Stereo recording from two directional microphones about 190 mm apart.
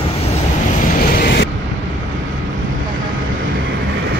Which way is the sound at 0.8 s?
55° left (ahead or behind).